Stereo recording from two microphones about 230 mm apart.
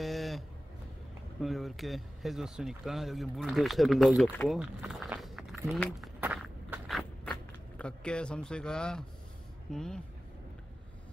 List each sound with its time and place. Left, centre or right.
0.0 s a sound: centre
1.4 s speech: centre
6.2 s walk: centre
9.7 s speech: centre